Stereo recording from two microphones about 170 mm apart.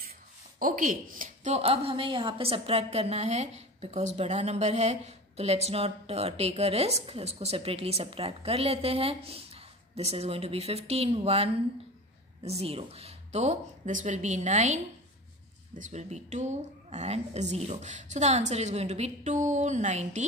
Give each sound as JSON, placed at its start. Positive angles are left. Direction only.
{"t": 0.6, "sound": "a woman's voice", "side_deg": -55}